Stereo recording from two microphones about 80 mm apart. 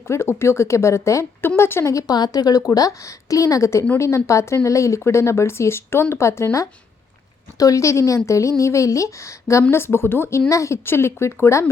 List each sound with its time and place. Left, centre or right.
0.1 s speech: left
1.9 s a woman's voice: left
2.1 s a woman's voice: left